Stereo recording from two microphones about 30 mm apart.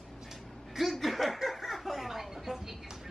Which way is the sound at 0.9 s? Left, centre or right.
Centre.